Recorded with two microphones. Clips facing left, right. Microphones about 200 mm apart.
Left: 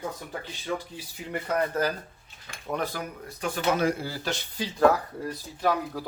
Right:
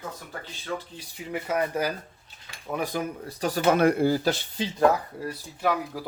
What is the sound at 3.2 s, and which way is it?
Speech, 35° right (ahead or behind).